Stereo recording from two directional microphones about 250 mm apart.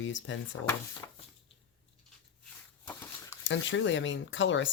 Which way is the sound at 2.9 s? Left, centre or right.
Centre.